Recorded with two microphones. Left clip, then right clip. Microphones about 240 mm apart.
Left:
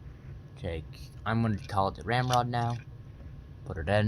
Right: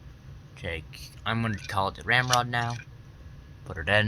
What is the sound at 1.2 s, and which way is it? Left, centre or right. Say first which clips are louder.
Speech: right 2 dB; right.